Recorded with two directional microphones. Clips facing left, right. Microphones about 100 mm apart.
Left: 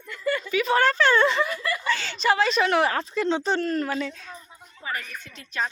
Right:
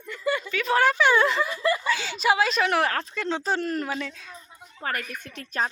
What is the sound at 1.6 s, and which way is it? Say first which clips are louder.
Speech: right 5 dB; 25° right (ahead or behind).